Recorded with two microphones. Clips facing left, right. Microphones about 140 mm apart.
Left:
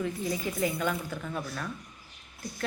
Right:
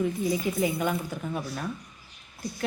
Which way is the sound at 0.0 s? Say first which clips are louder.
Right 5 dB; 15° right (ahead or behind).